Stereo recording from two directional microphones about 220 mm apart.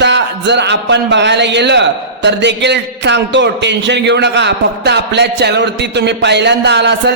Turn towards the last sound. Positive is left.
turn(degrees=-50)  # may be behind; listen again after turning